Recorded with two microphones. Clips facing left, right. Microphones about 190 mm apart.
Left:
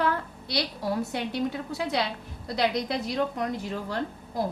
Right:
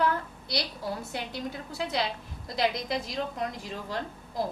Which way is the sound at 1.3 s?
65° left (ahead or behind).